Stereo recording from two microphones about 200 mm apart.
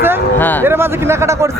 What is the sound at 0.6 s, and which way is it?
Speech, 10° right (ahead or behind).